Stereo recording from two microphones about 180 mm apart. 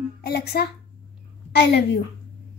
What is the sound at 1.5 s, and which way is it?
Speech, 70° left (ahead or behind).